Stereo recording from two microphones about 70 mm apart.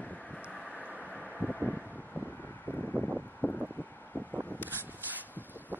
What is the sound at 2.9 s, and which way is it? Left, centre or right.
Wind, centre.